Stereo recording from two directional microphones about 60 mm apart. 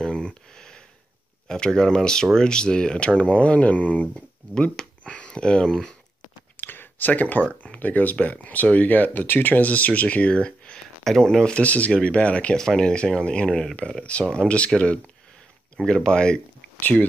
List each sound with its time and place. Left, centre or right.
0.0 s a sound: centre
1.5 s speech: centre
6.5 s a sound: left
7.6 s speech: left
11.6 s speech: left
12.5 s speech: centre
16.8 s speech: left